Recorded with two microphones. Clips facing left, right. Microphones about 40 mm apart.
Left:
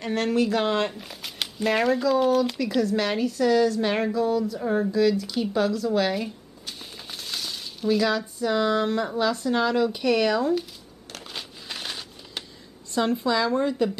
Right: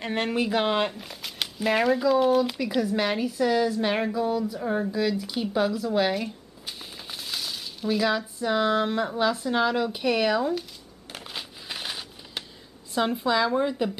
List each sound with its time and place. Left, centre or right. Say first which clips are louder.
0.0 s speech: left 3 dB; centre
0.9 s a woman's voice: even; centre
4.9 s a sound: left 4 dB; centre
8.4 s speech: left 1 dB; centre
11.1 s a sound: even; centre
12.9 s speech: left 1 dB; centre